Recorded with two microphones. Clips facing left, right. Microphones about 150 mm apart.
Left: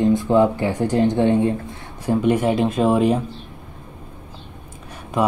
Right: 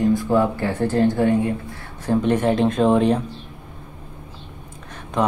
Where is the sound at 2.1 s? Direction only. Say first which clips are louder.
Left 1 dB; 10° left (ahead or behind).